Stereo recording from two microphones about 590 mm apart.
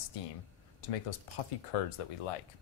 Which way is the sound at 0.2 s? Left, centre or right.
Left.